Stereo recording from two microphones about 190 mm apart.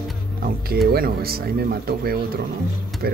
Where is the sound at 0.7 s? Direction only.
50° right (ahead or behind).